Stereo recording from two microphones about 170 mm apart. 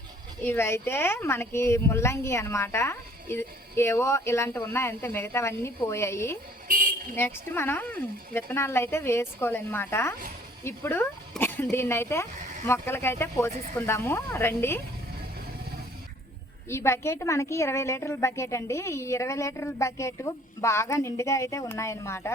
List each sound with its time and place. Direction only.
0.4 s speech: 15° left (ahead or behind)
6.7 s a sound: 55° right (ahead or behind)
7.2 s speech: 15° left (ahead or behind)
16.6 s speech: 15° left (ahead or behind)